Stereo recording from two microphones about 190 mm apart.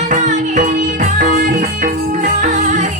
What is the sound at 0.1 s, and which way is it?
Music, 40° right (ahead or behind).